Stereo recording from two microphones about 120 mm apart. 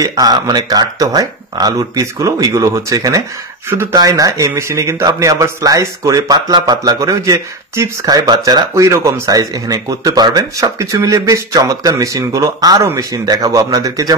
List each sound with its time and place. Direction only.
0.0 s speech: 30° right (ahead or behind)